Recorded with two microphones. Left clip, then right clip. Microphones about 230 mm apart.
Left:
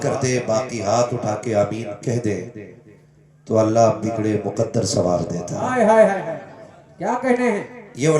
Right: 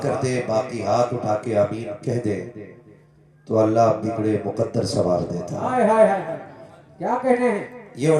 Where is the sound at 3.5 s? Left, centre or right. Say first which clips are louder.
Left 1 dB; left.